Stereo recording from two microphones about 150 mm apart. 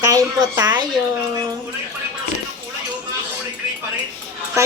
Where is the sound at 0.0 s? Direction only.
20° right (ahead or behind).